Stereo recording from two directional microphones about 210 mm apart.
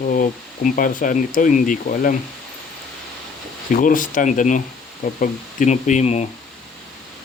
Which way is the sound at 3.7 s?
40° left (ahead or behind).